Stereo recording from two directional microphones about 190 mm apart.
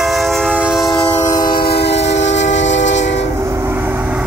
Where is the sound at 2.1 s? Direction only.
70° left (ahead or behind).